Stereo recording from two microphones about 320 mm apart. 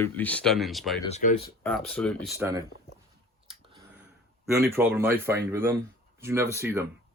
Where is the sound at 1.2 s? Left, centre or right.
Left.